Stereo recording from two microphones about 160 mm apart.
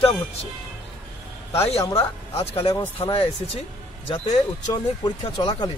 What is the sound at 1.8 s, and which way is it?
Speech, 20° left (ahead or behind).